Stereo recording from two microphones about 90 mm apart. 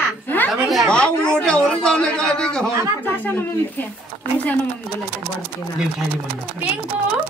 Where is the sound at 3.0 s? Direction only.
20° left (ahead or behind).